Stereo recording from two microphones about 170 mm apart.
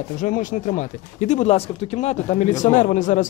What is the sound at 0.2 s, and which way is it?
Speech, 50° left (ahead or behind).